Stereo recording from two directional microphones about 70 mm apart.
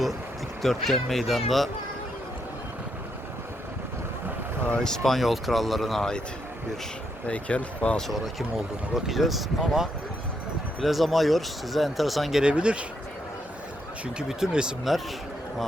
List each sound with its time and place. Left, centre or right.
0.6 s speech: centre
4.8 s speech: centre
7.3 s speech: centre
8.0 s speech: centre
12.4 s speech: centre
14.2 s speech: centre